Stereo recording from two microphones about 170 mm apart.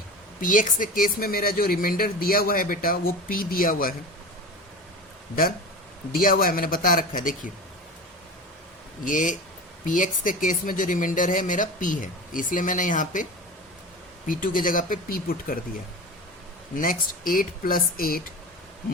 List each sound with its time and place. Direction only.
0.4 s speech: 50° left (ahead or behind)
6.1 s speech: 55° left (ahead or behind)
9.0 s speech: 50° left (ahead or behind)
14.3 s speech: 55° left (ahead or behind)
16.7 s speech: 55° left (ahead or behind)